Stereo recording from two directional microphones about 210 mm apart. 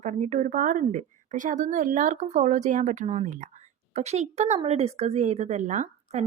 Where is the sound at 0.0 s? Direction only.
35° right (ahead or behind).